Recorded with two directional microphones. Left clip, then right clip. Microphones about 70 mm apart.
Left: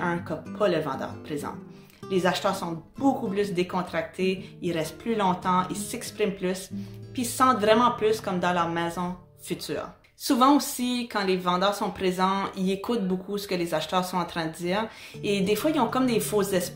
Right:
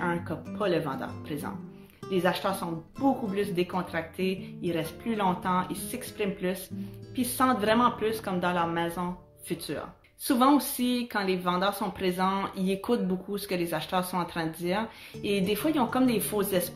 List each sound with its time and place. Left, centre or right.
0.0 s speech: right
2.1 s speech: right